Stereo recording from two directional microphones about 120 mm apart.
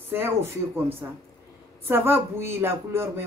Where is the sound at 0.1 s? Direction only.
20° right (ahead or behind).